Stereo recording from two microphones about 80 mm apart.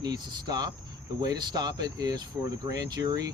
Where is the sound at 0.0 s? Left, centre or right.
Right.